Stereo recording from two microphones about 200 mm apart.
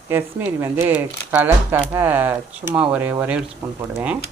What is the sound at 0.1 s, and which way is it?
Speech, 10° right (ahead or behind).